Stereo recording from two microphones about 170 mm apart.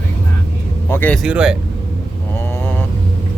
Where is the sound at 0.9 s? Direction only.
10° left (ahead or behind).